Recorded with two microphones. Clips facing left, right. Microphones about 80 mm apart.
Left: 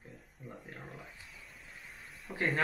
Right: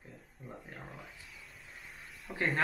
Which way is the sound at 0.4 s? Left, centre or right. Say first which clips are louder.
Even; centre.